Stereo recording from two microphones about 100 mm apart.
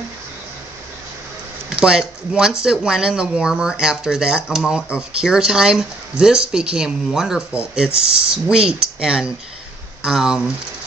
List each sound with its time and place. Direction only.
1.8 s speech: 5° right (ahead or behind)